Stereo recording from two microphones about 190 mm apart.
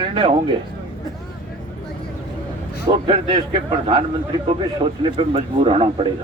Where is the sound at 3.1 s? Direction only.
25° right (ahead or behind).